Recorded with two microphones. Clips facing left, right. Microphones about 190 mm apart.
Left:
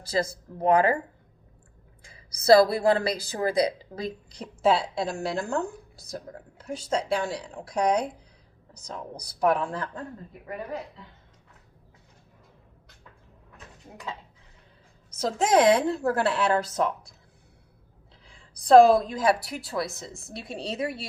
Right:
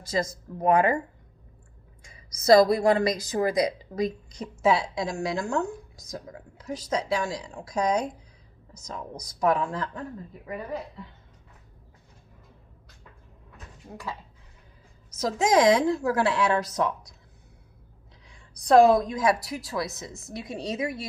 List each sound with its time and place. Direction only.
0.0 s a woman's voice: 30° left (ahead or behind)
2.0 s a woman's voice: 30° left (ahead or behind)
4.8 s a woman's voice: 60° left (ahead or behind)
5.4 s a woman's voice: 30° left (ahead or behind)
7.2 s a woman's voice: 60° left (ahead or behind)
7.5 s a woman's voice: 30° left (ahead or behind)
15.1 s a woman's voice: 30° left (ahead or behind)
18.5 s a woman's voice: 30° left (ahead or behind)